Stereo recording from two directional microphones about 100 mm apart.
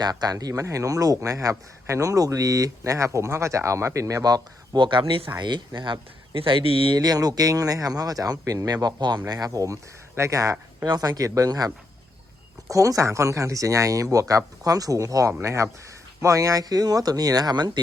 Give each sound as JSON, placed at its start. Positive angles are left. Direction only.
{"t": 0.0, "sound": "speech", "side_deg": -45}
{"t": 6.9, "sound": "speech", "side_deg": -40}
{"t": 12.7, "sound": "speech", "side_deg": -35}